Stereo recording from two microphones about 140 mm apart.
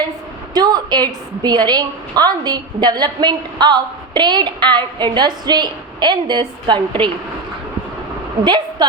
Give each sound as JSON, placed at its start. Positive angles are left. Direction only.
{"t": 0.5, "sound": "a woman's voice", "side_deg": -30}
{"t": 8.4, "sound": "a woman's voice", "side_deg": -30}